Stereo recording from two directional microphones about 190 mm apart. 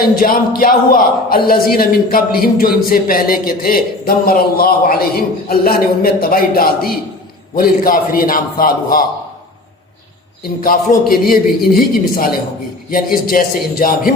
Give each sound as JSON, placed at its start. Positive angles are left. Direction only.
{"t": 0.2, "sound": "a man's voice", "side_deg": 50}
{"t": 10.6, "sound": "a man's voice", "side_deg": 50}